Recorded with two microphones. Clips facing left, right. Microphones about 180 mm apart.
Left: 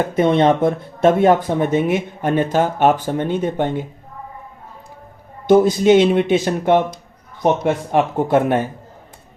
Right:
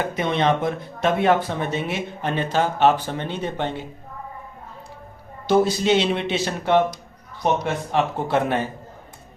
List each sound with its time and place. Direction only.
0.2 s speech: 50° left (ahead or behind)
5.5 s speech: 50° left (ahead or behind)